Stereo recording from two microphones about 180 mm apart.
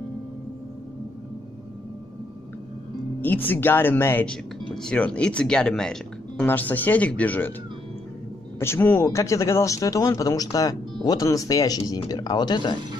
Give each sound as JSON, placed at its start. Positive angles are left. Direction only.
{"t": 3.2, "sound": "speech", "side_deg": 10}
{"t": 8.5, "sound": "speech", "side_deg": 15}